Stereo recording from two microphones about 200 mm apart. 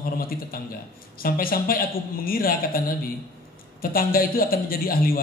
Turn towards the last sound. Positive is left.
turn(degrees=45)  # may be behind; listen again after turning